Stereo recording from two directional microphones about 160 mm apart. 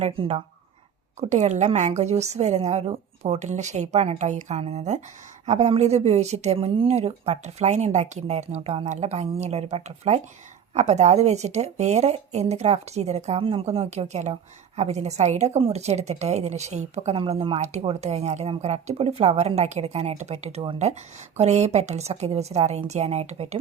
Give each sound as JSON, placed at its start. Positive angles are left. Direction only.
{"t": 0.0, "sound": "speech", "side_deg": -40}